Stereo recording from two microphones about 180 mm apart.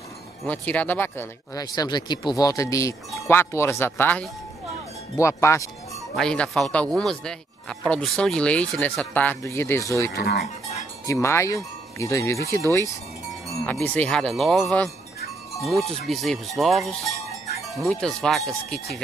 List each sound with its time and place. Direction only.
0.5 s speech: 10° left (ahead or behind)
6.1 s speech: 5° left (ahead or behind)
13.7 s speech: 10° left (ahead or behind)